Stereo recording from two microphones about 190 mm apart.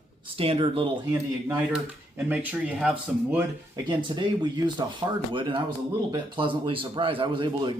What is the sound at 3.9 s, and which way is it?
Speech, 25° right (ahead or behind).